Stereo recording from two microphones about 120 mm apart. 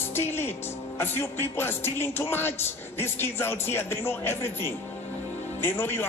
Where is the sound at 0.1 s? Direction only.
20° left (ahead or behind).